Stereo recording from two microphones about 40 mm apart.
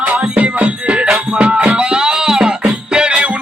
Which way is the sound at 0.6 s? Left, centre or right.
Right.